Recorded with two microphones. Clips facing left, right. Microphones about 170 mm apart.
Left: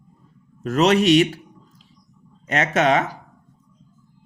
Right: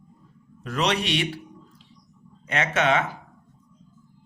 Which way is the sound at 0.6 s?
45° left (ahead or behind).